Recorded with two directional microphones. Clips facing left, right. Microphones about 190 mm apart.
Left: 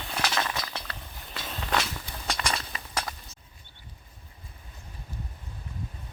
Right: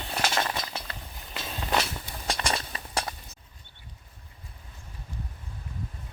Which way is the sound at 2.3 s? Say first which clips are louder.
Right 2 dB; 30° right (ahead or behind).